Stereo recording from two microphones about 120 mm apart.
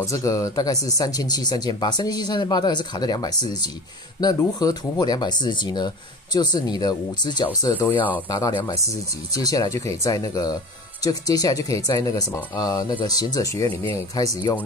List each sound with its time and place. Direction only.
0.0 s speech: 25° left (ahead or behind)
7.9 s speech: 15° left (ahead or behind)
8.3 s speech: 30° left (ahead or behind)